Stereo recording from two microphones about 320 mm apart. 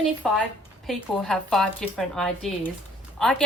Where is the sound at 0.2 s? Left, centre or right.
Centre.